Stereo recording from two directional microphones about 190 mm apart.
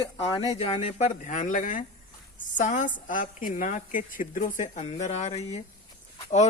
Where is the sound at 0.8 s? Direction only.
40° left (ahead or behind).